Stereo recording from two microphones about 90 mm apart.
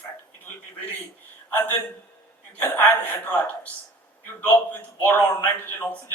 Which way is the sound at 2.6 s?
20° left (ahead or behind).